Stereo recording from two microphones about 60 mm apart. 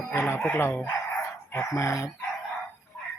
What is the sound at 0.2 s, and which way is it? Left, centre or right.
Speech, left.